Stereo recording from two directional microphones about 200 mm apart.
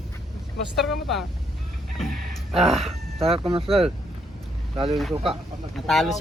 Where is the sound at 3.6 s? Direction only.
30° right (ahead or behind).